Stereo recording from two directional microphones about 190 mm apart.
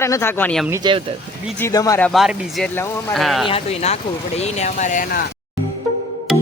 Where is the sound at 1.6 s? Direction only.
15° left (ahead or behind).